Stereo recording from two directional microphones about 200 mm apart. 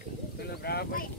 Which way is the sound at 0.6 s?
50° left (ahead or behind).